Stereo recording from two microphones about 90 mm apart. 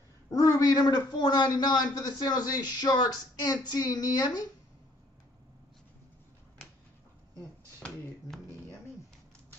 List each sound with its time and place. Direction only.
0.3 s a man's voice: 40° left (ahead or behind)